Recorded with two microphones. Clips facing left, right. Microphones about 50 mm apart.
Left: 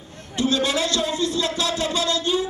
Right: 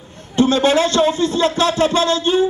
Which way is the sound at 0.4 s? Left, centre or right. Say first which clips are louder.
Right 8 dB; right.